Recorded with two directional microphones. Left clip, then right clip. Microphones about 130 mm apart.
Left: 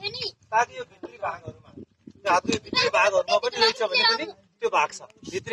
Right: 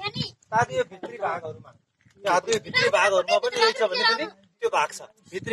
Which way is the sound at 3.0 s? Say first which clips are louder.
Even; 25° right (ahead or behind).